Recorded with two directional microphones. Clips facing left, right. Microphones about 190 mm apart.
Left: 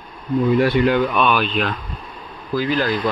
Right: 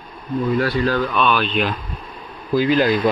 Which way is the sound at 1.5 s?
Centre (ahead or behind).